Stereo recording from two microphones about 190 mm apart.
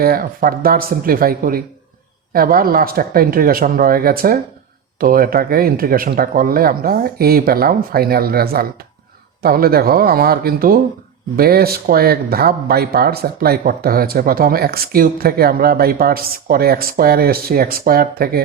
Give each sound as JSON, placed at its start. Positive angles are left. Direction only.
{"t": 0.0, "sound": "speech", "side_deg": -50}